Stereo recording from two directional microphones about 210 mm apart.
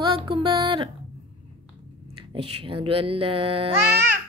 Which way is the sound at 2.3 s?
25° right (ahead or behind).